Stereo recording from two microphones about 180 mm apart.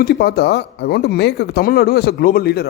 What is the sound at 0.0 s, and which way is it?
Speech, 65° left (ahead or behind).